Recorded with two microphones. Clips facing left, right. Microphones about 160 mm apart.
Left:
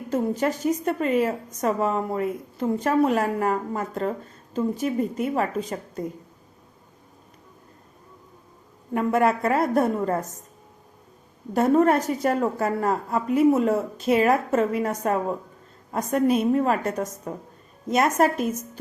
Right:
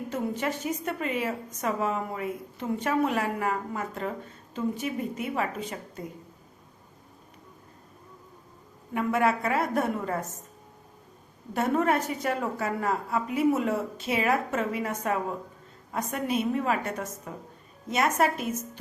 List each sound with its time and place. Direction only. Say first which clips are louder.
0.1 s a woman's voice: left 7 dB; 40° left (ahead or behind)
8.9 s a woman's voice: left 4 dB; 40° left (ahead or behind)
11.5 s a woman's voice: left 6 dB; 40° left (ahead or behind)